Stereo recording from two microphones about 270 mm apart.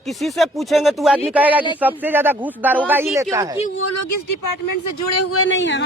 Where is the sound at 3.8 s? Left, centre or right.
Left.